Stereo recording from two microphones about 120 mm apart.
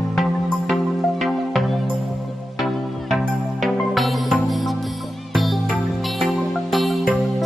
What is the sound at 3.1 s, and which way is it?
Music, centre (ahead or behind).